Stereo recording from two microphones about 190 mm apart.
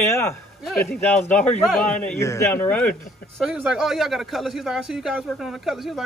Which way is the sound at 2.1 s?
15° left (ahead or behind).